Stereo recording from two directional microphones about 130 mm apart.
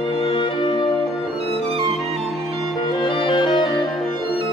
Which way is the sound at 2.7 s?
35° left (ahead or behind).